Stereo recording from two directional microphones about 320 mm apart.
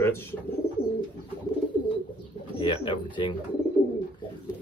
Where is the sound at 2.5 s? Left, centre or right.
Centre.